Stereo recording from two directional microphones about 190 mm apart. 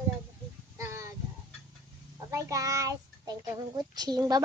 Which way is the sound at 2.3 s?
15° right (ahead or behind).